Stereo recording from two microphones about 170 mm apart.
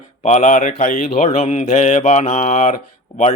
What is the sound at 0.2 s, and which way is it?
Mantra, 40° left (ahead or behind).